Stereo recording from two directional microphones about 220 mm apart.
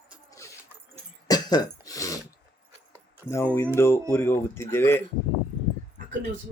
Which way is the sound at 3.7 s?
10° left (ahead or behind).